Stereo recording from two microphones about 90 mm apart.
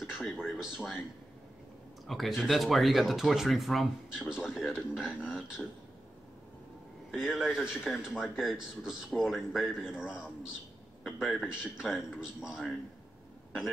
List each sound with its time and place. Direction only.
0.5 s speech: 5° right (ahead or behind)
2.0 s speech: centre (ahead or behind)
7.1 s a man's voice: 5° right (ahead or behind)